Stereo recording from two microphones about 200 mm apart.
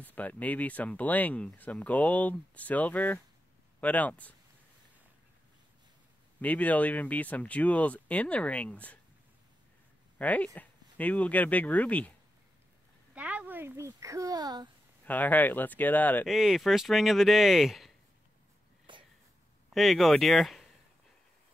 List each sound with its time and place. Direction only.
0.0 s speech: 10° left (ahead or behind)
6.4 s speech: 10° left (ahead or behind)
10.1 s speech: 10° left (ahead or behind)
13.1 s a child's voice: 5° right (ahead or behind)
15.0 s speech: 10° left (ahead or behind)
18.9 s a sound: 25° right (ahead or behind)
19.7 s speech: centre (ahead or behind)